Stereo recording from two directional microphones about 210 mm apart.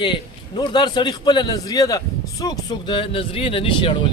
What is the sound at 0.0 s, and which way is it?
A man's voice, 25° left (ahead or behind).